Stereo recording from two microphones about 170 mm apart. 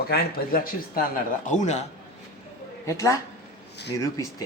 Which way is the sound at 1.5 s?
45° left (ahead or behind).